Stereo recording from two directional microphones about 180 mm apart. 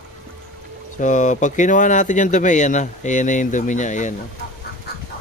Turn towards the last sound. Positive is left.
turn(degrees=45)  # may be behind; listen again after turning